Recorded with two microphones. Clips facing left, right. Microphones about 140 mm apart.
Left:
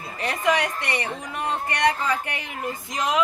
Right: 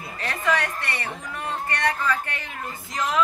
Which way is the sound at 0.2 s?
15° left (ahead or behind).